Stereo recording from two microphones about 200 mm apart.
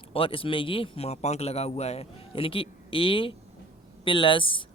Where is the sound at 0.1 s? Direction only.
25° left (ahead or behind).